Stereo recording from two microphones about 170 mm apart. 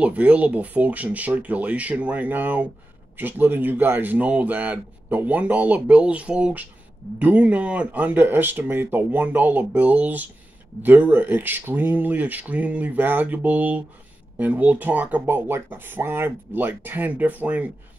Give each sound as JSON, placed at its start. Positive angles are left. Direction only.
{"t": 0.0, "sound": "speech", "side_deg": -10}